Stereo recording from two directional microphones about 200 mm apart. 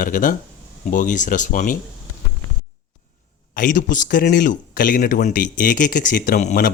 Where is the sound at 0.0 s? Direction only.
40° left (ahead or behind).